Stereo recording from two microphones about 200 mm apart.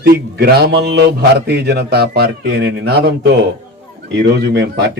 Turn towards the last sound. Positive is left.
turn(degrees=-55)  # may be behind; listen again after turning